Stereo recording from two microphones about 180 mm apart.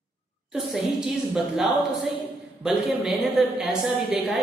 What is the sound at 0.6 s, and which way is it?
A woman's voice, centre (ahead or behind).